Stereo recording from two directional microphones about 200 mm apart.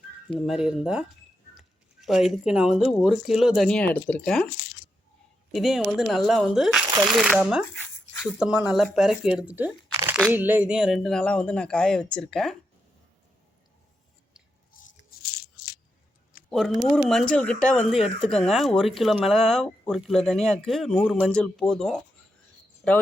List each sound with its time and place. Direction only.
0.3 s speech: centre (ahead or behind)
5.5 s speech: centre (ahead or behind)
14.8 s a sound: 45° left (ahead or behind)
16.5 s speech: centre (ahead or behind)